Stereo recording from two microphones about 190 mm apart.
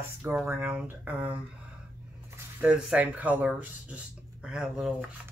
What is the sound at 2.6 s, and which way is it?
Speech, 5° right (ahead or behind).